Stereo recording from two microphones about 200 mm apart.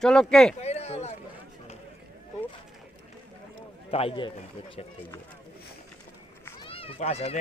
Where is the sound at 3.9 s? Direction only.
25° left (ahead or behind).